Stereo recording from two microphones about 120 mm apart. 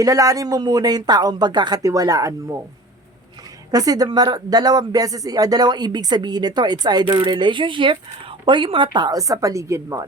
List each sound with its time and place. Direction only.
0.0 s speech: 30° right (ahead or behind)
3.7 s speech: 30° right (ahead or behind)